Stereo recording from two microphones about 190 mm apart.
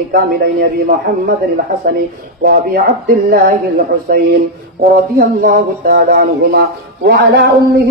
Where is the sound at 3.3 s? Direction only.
55° right (ahead or behind).